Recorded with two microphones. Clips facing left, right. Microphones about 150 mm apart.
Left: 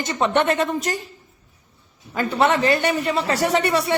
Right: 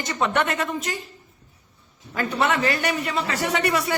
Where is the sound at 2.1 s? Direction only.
25° left (ahead or behind).